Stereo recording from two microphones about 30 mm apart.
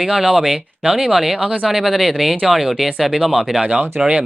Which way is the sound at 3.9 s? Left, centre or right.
Right.